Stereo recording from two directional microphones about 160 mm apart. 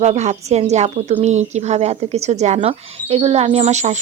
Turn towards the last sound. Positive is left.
turn(degrees=-45)  # may be behind; listen again after turning